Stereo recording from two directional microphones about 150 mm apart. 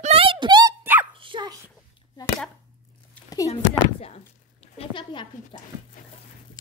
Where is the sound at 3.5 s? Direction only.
45° left (ahead or behind).